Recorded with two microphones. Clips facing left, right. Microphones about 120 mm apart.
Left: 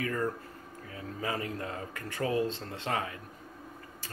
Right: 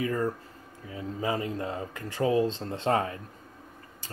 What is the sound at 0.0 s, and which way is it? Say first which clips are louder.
Speech: right 3 dB; 20° right (ahead or behind).